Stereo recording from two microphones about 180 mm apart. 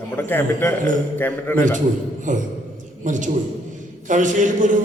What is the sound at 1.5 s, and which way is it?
A man's voice, 45° right (ahead or behind).